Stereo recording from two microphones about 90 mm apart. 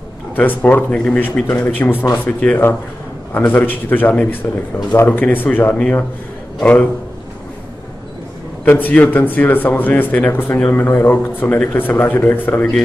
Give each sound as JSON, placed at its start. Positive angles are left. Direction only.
{"t": 0.4, "sound": "speech", "side_deg": 20}
{"t": 1.5, "sound": "speech", "side_deg": 20}
{"t": 8.6, "sound": "speech", "side_deg": 20}